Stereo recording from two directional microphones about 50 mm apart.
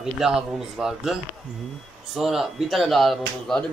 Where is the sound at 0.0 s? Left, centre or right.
Centre.